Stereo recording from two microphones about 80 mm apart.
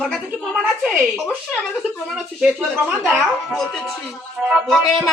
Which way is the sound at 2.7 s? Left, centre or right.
Right.